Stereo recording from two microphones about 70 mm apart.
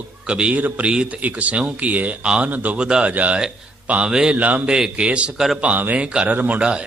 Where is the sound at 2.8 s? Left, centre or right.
Centre.